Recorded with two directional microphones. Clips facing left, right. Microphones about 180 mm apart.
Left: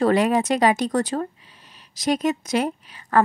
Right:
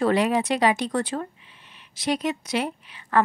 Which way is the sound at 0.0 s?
45° left (ahead or behind).